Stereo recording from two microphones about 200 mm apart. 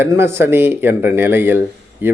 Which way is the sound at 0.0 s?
10° right (ahead or behind).